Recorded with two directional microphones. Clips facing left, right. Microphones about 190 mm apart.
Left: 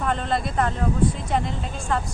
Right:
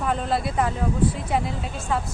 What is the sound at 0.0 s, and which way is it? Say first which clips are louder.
Speech: even; 5° right (ahead or behind).